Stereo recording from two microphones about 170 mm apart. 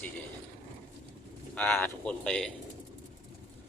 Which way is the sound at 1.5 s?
5° left (ahead or behind).